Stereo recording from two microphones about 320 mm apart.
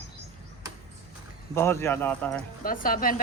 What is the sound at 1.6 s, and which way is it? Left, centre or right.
Speech, centre.